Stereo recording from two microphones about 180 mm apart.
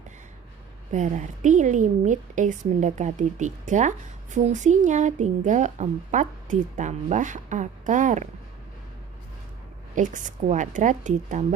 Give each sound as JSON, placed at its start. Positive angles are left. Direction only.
{"t": 0.9, "sound": "a woman's voice", "side_deg": -40}
{"t": 9.9, "sound": "a woman's voice", "side_deg": -45}